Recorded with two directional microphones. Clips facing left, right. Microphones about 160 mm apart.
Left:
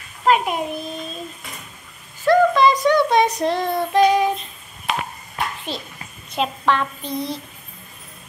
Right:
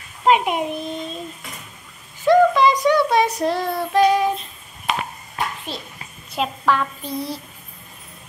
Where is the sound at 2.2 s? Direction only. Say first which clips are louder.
Right 1 dB; 15° right (ahead or behind).